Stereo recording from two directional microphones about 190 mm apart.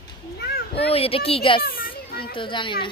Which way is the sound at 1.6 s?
50° left (ahead or behind).